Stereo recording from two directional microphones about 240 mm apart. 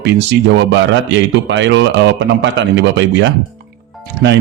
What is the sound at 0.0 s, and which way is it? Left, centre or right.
Speech, right.